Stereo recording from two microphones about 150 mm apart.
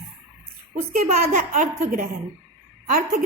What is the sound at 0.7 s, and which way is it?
A woman's voice, 50° right (ahead or behind).